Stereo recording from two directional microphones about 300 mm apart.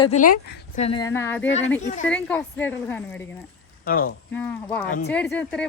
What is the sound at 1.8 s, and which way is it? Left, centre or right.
Speech, left.